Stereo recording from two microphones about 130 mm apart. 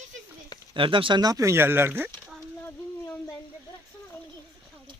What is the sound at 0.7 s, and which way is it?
Speech, 40° right (ahead or behind).